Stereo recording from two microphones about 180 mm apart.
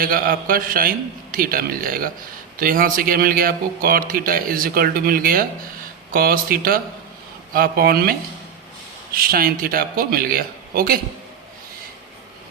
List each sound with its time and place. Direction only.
0.0 s a man's voice: 50° right (ahead or behind)
9.1 s speech: 55° right (ahead or behind)